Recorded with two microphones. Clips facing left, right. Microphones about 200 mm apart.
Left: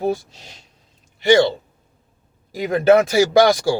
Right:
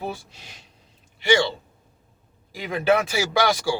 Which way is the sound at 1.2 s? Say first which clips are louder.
Left 7 dB; 40° left (ahead or behind).